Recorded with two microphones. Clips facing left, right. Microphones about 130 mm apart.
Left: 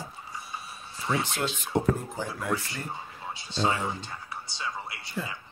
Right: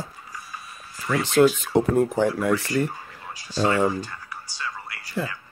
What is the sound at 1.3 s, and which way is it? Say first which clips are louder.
Speech: right 11 dB; 80° right.